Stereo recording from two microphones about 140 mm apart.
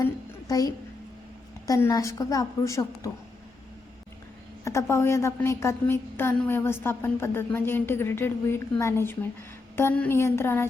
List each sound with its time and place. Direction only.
0.0 s music: 25° left (ahead or behind)
1.6 s a woman's voice: 25° left (ahead or behind)
4.6 s a woman's voice: 20° left (ahead or behind)